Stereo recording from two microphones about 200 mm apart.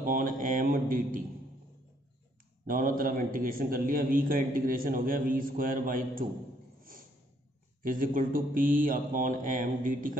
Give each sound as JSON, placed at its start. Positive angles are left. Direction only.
{"t": 0.0, "sound": "a man's voice", "side_deg": -45}
{"t": 2.6, "sound": "a man's voice", "side_deg": -45}
{"t": 6.8, "sound": "a sound", "side_deg": -45}
{"t": 7.8, "sound": "a man's voice", "side_deg": -45}